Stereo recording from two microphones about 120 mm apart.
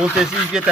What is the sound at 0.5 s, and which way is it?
Speech, 5° right (ahead or behind).